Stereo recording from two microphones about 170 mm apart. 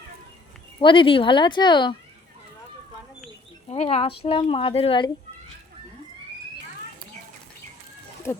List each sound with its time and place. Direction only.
0.8 s speech: 30° left (ahead or behind)
3.7 s speech: 35° left (ahead or behind)
8.3 s speech: 15° left (ahead or behind)